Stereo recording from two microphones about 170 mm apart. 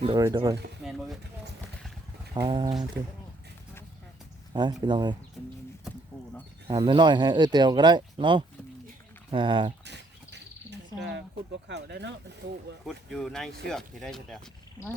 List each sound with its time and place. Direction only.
0.2 s speech: 20° right (ahead or behind)
0.9 s speech: centre (ahead or behind)
2.3 s speech: 25° right (ahead or behind)
4.5 s speech: 25° right (ahead or behind)
6.7 s speech: 25° right (ahead or behind)
9.8 s cricket: 90° right
11.7 s speech: 85° right
12.8 s speech: centre (ahead or behind)